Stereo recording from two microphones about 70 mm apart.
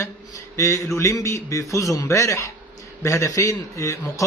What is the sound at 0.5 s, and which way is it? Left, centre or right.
A man's voice, left.